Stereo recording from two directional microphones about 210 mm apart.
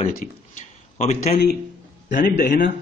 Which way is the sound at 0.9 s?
35° left (ahead or behind).